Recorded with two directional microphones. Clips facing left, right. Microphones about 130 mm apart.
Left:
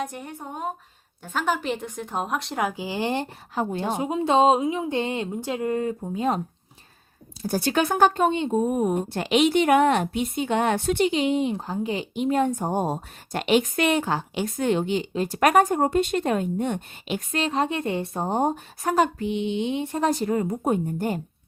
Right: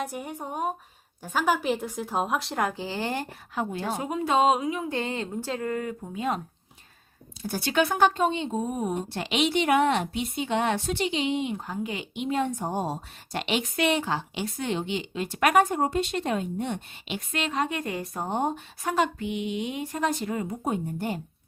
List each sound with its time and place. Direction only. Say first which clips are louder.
0.0 s a woman's voice: even; 10° right (ahead or behind); by 3.3 s 20° left (ahead or behind)
3.5 s a woman's voice: left 4 dB; 35° left (ahead or behind)
3.8 s speech: left 5 dB; 20° left (ahead or behind)
7.4 s a woman's voice: left 2 dB; 40° left (ahead or behind); by 20.1 s 25° left (ahead or behind)
20.1 s a woman's voice: left 6 dB; 40° left (ahead or behind)